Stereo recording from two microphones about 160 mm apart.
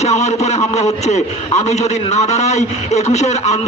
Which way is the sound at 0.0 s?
45° left (ahead or behind).